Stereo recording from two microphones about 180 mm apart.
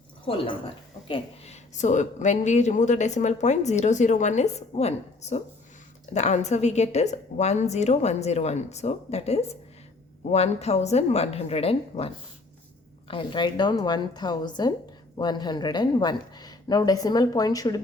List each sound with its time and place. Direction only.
1.0 s a woman's voice: 35° left (ahead or behind)